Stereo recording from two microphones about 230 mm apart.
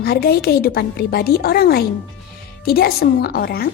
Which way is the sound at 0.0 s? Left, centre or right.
Left.